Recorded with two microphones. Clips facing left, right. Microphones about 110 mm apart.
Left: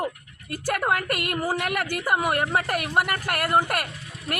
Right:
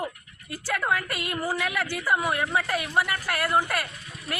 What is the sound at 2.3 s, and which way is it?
Speech, 55° left (ahead or behind).